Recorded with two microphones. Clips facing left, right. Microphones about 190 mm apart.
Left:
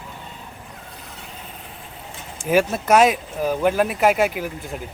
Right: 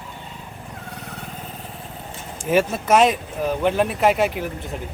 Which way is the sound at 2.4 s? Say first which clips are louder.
Left 1 dB; centre (ahead or behind).